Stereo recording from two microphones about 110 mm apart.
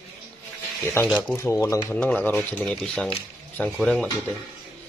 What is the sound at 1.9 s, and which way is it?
A man's voice, 10° left (ahead or behind).